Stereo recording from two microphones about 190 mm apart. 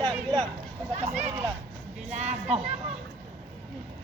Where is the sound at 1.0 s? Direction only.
35° right (ahead or behind).